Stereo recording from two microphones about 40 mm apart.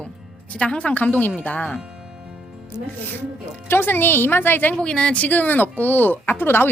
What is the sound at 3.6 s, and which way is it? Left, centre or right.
Speech, left.